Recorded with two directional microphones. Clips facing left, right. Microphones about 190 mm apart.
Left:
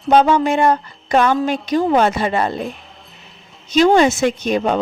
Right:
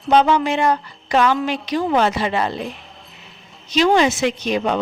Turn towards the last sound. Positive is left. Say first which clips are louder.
# left 2 dB
turn(degrees=50)  # may be behind; listen again after turning